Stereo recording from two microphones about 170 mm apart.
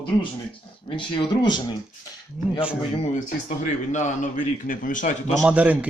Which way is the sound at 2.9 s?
35° left (ahead or behind).